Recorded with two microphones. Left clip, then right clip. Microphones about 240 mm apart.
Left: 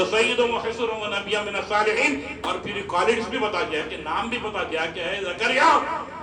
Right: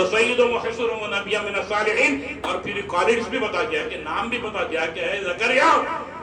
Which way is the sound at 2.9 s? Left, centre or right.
Left.